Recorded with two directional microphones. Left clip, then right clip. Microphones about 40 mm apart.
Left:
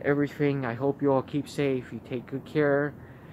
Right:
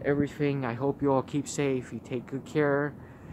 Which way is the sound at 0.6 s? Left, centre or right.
Centre.